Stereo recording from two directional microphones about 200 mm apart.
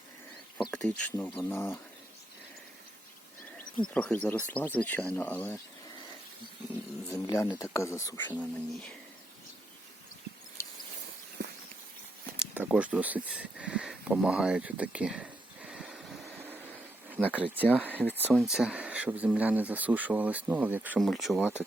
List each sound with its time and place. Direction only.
0.7 s speech: 5° left (ahead or behind)
3.8 s speech: 5° left (ahead or behind)
7.1 s speech: 15° left (ahead or behind)
12.4 s speech: 5° right (ahead or behind)
17.5 s speech: 10° right (ahead or behind)
17.8 s speech: 10° left (ahead or behind)
18.3 s speech: 5° right (ahead or behind)